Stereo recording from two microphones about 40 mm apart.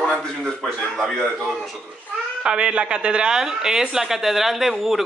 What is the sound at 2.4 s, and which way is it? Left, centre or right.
Speech, right.